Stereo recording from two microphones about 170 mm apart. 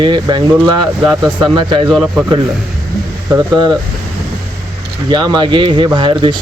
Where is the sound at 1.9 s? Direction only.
Centre (ahead or behind).